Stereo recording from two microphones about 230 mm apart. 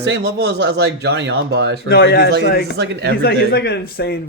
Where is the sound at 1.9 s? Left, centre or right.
Left.